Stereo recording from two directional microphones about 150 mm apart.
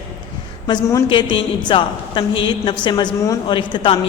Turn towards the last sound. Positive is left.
turn(degrees=35)  # may be behind; listen again after turning